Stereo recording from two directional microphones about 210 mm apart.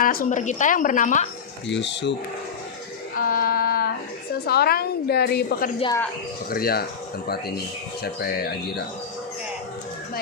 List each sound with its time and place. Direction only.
0.0 s speech: 40° left (ahead or behind)
1.6 s speech: 55° left (ahead or behind)
3.2 s child singing: 45° left (ahead or behind)
4.4 s a woman's voice: 50° left (ahead or behind)